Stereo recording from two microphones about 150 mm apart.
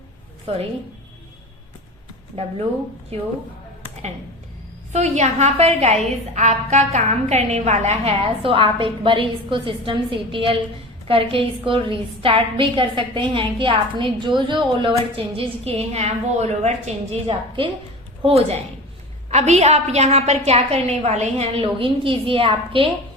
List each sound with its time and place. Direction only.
0.5 s a woman's voice: 40° right (ahead or behind)
2.3 s a woman's voice: 40° right (ahead or behind)
4.9 s a woman's voice: 50° right (ahead or behind)
21.6 s a woman's voice: 35° right (ahead or behind)